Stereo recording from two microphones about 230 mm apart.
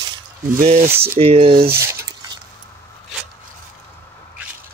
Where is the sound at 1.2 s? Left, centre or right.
Right.